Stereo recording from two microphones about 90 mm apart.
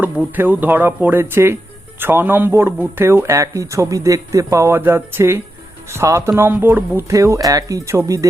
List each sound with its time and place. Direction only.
0.0 s speech: 20° right (ahead or behind)
6.5 s speech: 20° right (ahead or behind)
7.1 s speech: 35° right (ahead or behind)